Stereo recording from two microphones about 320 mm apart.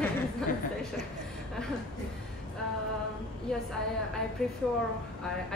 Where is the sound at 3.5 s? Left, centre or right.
Centre.